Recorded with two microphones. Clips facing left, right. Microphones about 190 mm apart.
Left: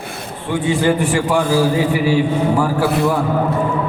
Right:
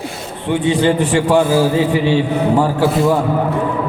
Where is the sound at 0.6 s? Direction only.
20° right (ahead or behind).